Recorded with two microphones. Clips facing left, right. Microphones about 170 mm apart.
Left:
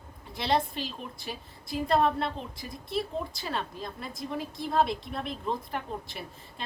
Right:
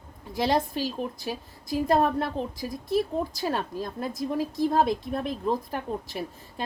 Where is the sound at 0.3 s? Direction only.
45° right (ahead or behind).